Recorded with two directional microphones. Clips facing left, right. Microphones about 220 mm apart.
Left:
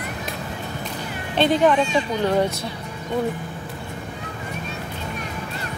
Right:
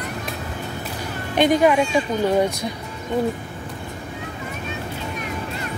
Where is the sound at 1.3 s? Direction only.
10° right (ahead or behind).